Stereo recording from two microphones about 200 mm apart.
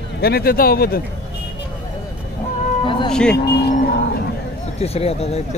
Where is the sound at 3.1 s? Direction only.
5° left (ahead or behind).